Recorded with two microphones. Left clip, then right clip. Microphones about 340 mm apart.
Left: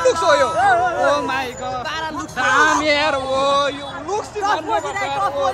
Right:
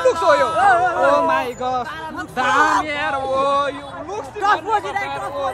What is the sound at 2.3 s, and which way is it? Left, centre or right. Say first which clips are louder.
Speech: even; centre.